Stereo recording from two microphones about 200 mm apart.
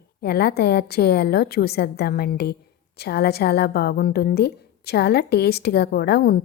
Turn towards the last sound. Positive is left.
turn(degrees=55)  # may be behind; listen again after turning